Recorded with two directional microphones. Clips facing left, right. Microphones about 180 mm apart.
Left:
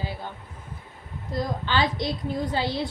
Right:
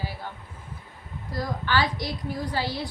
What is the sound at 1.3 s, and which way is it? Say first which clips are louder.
A woman's voice: left 1 dB; 20° left (ahead or behind).